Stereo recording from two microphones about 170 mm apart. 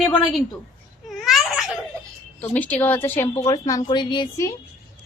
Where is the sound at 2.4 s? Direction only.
10° left (ahead or behind).